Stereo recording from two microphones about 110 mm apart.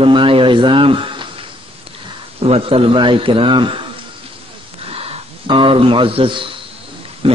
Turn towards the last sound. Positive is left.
turn(degrees=-55)  # may be behind; listen again after turning